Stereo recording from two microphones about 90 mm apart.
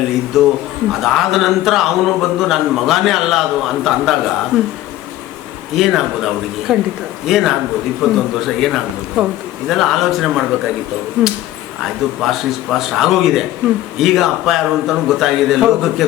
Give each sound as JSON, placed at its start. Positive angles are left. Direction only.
{"t": 0.3, "sound": "a man's voice", "side_deg": 0}
{"t": 5.7, "sound": "a man's voice", "side_deg": -5}
{"t": 11.8, "sound": "a man's voice", "side_deg": 0}